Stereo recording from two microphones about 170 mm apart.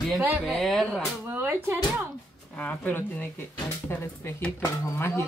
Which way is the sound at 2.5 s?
10° left (ahead or behind).